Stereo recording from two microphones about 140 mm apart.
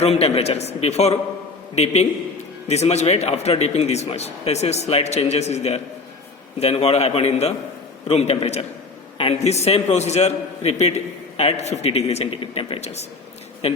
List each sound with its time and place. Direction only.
0.0 s a man's voice: 45° left (ahead or behind)